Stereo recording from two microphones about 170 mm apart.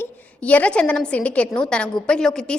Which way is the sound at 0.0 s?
10° left (ahead or behind).